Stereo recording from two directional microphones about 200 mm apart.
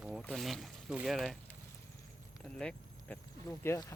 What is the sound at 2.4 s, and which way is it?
Speech, 5° left (ahead or behind).